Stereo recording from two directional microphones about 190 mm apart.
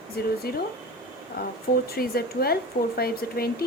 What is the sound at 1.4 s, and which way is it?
A woman's voice, 50° left (ahead or behind).